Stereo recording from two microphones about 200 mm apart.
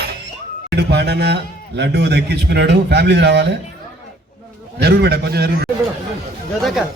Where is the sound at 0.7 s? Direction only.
55° right (ahead or behind).